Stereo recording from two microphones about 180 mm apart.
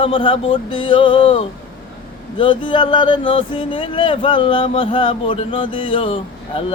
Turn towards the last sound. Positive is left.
turn(degrees=30)  # may be behind; listen again after turning